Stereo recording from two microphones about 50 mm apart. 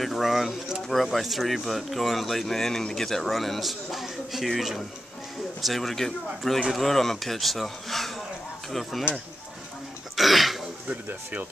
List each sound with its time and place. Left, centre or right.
0.0 s speech: centre
9.1 s speech: left
10.1 s throat clearing: centre